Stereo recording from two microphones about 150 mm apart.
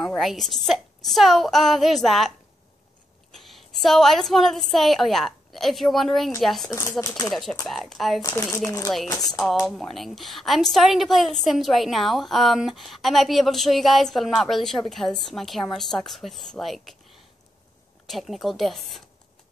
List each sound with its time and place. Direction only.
0.1 s a woman's voice: centre (ahead or behind)
3.3 s a woman's voice: centre (ahead or behind)
6.7 s speech: 20° left (ahead or behind)
7.2 s a woman's voice: centre (ahead or behind)
8.2 s speech: 20° left (ahead or behind)
9.7 s a woman's voice: centre (ahead or behind)
18.0 s a woman's voice: centre (ahead or behind)